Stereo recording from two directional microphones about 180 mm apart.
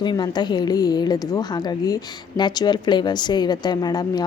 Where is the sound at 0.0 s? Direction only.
25° left (ahead or behind).